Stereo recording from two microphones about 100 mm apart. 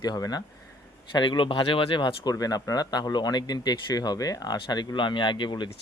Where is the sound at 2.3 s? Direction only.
40° left (ahead or behind).